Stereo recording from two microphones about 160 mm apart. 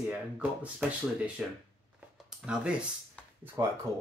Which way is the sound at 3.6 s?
20° right (ahead or behind).